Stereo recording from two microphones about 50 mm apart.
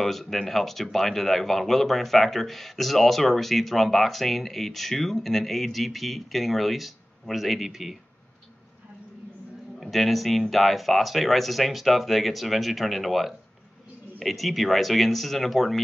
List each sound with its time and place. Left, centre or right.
0.0 s speech: centre
9.8 s speech: centre